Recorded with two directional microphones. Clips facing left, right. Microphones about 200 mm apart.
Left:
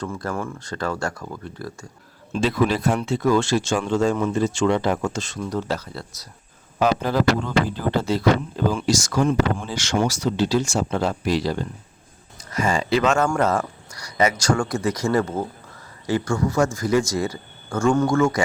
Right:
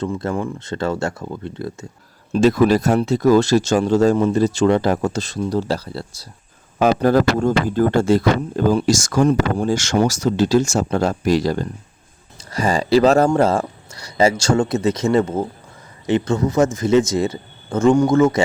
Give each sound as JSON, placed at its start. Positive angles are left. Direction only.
{"t": 0.0, "sound": "speech", "side_deg": -20}
{"t": 2.3, "sound": "speech", "side_deg": -45}
{"t": 6.7, "sound": "speech", "side_deg": -50}
{"t": 12.4, "sound": "speech", "side_deg": -35}